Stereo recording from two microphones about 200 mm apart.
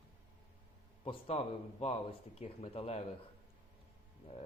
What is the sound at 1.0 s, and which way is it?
Speech, 25° left (ahead or behind).